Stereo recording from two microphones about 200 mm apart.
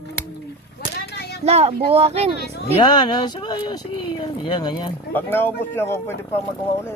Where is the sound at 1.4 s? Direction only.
30° right (ahead or behind).